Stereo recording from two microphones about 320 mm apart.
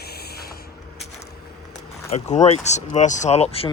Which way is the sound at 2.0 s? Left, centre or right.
Left.